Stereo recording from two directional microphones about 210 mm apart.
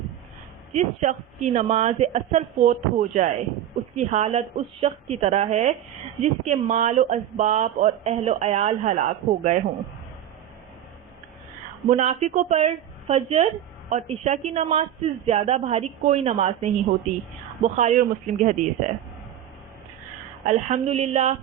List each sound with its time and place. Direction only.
0.7 s speech: 35° right (ahead or behind)
11.9 s speech: 35° right (ahead or behind)
20.4 s speech: 35° right (ahead or behind)